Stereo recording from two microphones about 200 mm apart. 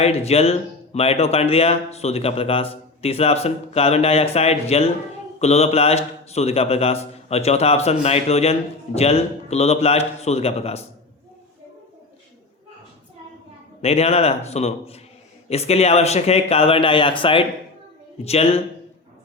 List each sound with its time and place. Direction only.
0.0 s speech: 30° left (ahead or behind)
13.8 s speech: 30° left (ahead or behind)